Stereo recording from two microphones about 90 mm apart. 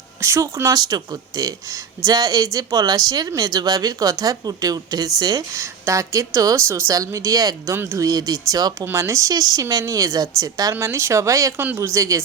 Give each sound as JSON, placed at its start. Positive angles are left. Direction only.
{"t": 0.2, "sound": "speech", "side_deg": -35}
{"t": 7.8, "sound": "speech", "side_deg": -25}
{"t": 8.0, "sound": "speech", "side_deg": -40}
{"t": 8.8, "sound": "speech", "side_deg": -30}